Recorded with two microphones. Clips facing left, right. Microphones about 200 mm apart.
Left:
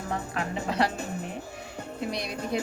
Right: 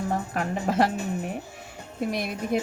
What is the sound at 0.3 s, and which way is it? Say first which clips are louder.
Speech: right 4 dB; 50° right (ahead or behind).